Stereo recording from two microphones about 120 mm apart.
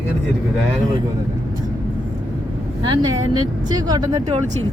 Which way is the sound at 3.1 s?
35° right (ahead or behind).